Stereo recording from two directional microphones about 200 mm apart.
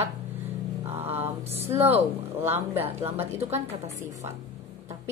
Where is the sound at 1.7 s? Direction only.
30° right (ahead or behind).